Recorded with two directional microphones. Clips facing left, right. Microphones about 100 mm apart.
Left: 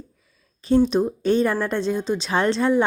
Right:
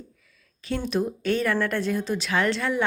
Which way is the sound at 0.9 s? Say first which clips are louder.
Left 5 dB; 25° left (ahead or behind).